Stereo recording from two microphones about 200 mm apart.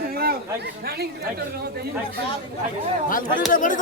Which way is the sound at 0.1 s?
50° right (ahead or behind).